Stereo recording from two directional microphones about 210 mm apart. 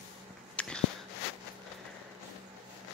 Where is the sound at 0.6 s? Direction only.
5° left (ahead or behind).